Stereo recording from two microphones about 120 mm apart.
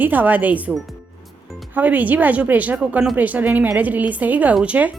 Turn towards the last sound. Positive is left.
turn(degrees=-10)  # may be behind; listen again after turning